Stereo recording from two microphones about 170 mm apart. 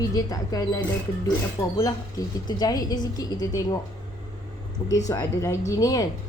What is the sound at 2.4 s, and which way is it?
Speech, 25° left (ahead or behind).